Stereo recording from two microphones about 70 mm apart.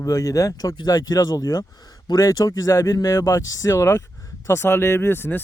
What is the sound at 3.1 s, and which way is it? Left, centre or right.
A man's voice, left.